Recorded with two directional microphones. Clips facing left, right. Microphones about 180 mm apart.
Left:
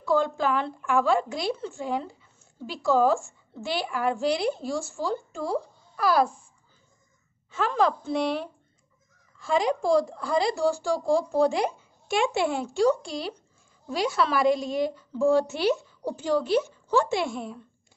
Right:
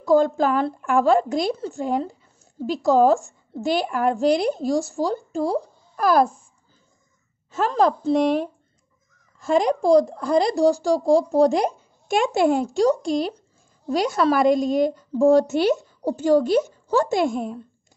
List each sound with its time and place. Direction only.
0.0 s a woman's voice: 40° right (ahead or behind)
7.5 s a woman's voice: 40° right (ahead or behind)